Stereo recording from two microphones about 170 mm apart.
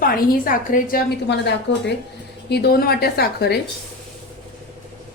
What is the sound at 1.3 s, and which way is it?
Speech, 90° left.